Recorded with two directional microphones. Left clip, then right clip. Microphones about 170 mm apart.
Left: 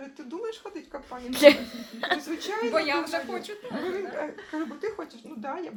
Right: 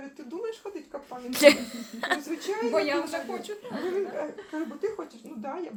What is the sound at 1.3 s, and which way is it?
Speech, 15° left (ahead or behind).